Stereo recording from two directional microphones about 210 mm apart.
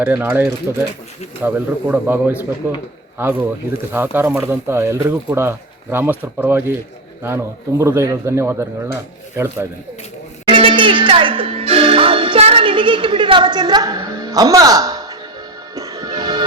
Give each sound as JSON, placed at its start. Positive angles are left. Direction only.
{"t": 0.0, "sound": "speech", "side_deg": -10}
{"t": 10.5, "sound": "speech", "side_deg": -25}
{"t": 15.7, "sound": "music", "side_deg": -15}